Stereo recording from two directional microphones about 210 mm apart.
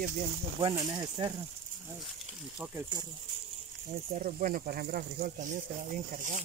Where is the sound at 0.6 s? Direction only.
15° right (ahead or behind).